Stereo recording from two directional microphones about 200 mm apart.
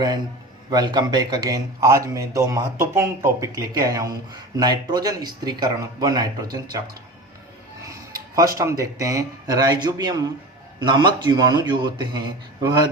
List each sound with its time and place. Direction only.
0.7 s a man's voice: 20° right (ahead or behind)
7.9 s speech: 15° right (ahead or behind)